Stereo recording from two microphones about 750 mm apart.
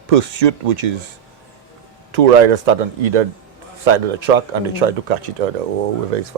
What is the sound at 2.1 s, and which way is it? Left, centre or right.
Speech, right.